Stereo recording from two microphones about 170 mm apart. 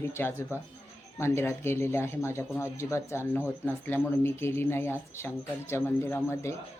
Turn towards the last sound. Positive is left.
turn(degrees=15)  # may be behind; listen again after turning